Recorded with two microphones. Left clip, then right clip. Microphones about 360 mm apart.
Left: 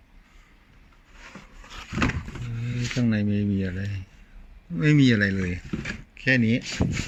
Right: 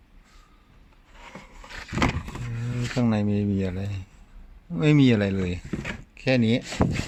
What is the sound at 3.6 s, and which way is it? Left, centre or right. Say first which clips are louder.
Speech: right 2 dB; right.